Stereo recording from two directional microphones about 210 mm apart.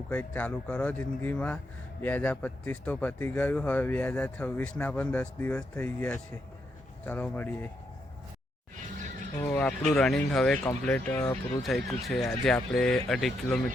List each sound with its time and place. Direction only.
0.1 s speech: 5° left (ahead or behind)
9.5 s speech: 5° left (ahead or behind)